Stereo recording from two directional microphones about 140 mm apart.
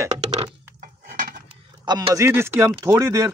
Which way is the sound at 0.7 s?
75° right (ahead or behind).